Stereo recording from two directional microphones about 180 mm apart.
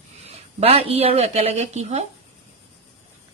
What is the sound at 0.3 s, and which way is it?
Speech, 35° right (ahead or behind).